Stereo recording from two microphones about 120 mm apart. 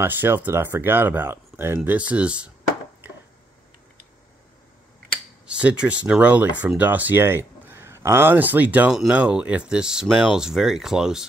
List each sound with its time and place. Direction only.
0.0 s speech: 20° right (ahead or behind)
5.5 s speech: 10° right (ahead or behind)